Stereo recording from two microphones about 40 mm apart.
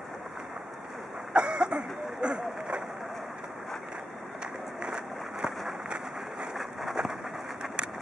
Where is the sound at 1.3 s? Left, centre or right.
Right.